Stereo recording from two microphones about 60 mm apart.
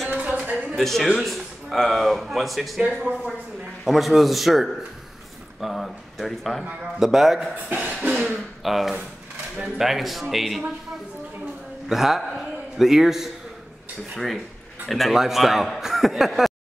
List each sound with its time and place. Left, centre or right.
0.1 s a sound: right
0.7 s speech: centre
2.8 s speech: centre
3.8 s speech: centre
11.9 s a man's voice: centre